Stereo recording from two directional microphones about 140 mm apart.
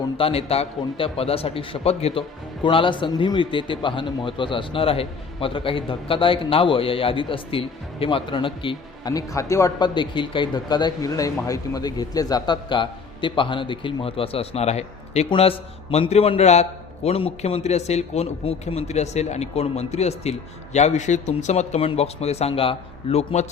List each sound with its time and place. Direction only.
0.2 s a man's voice: 45° left (ahead or behind)
2.6 s a man's voice: 35° left (ahead or behind)
9.1 s a man's voice: 25° left (ahead or behind); by 23.5 s 50° left (ahead or behind)